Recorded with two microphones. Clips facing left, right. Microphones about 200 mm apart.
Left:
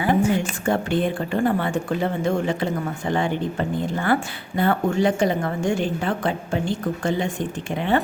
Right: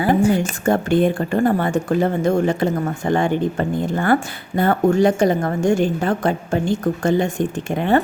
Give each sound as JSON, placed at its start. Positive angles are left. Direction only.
{"t": 0.0, "sound": "a woman's voice", "side_deg": -35}